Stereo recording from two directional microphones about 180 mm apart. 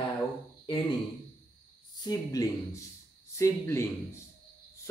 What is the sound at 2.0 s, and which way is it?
A man's voice, 20° left (ahead or behind).